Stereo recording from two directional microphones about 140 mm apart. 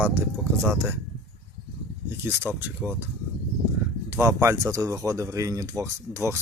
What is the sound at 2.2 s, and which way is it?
Speech, 15° right (ahead or behind).